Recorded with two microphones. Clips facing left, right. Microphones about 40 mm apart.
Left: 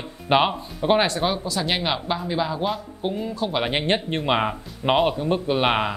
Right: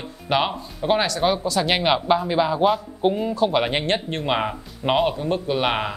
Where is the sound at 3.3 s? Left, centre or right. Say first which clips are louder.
Right 4 dB; centre.